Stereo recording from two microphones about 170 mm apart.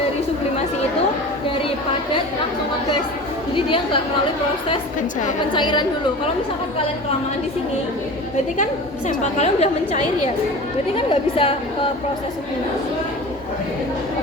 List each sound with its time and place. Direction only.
3.5 s a woman's voice: 30° left (ahead or behind)
5.5 s a woman's voice: 25° left (ahead or behind)
9.0 s a woman's voice: 45° left (ahead or behind)
10.9 s a woman's voice: 35° left (ahead or behind)